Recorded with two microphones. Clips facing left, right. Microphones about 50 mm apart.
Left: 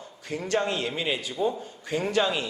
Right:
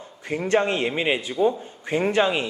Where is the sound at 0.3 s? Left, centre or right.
Right.